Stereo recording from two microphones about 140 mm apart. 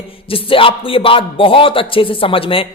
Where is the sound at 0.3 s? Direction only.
40° left (ahead or behind).